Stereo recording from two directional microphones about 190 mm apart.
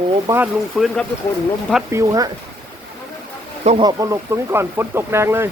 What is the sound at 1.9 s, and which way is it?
Speech, 15° right (ahead or behind).